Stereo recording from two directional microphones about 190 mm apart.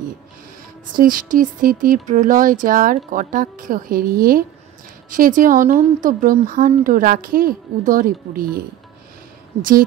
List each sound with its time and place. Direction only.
0.9 s speech: 45° right (ahead or behind)